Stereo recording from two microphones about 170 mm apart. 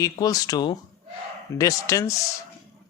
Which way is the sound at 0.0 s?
20° left (ahead or behind).